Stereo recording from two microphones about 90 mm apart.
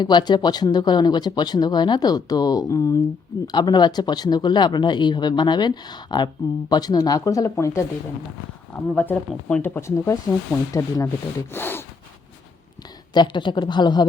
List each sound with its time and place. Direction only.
0.0 s speech: 55° left (ahead or behind); by 3.0 s 35° left (ahead or behind)
3.4 s speech: 55° left (ahead or behind); by 7.9 s 35° left (ahead or behind)
9.0 s speech: 20° left (ahead or behind); by 11.1 s 40° left (ahead or behind)
11.5 s speech: 25° left (ahead or behind)
13.1 s speech: 60° left (ahead or behind)